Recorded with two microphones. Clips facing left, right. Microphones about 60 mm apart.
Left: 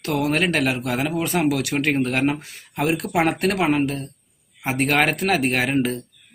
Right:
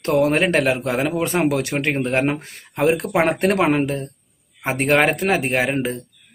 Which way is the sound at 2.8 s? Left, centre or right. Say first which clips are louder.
Right 3 dB; right.